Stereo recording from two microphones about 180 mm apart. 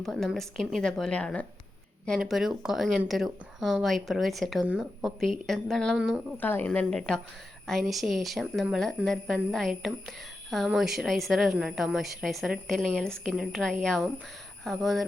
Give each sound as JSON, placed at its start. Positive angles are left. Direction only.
{"t": 0.0, "sound": "a woman's voice", "side_deg": 0}
{"t": 6.3, "sound": "a woman's voice", "side_deg": 10}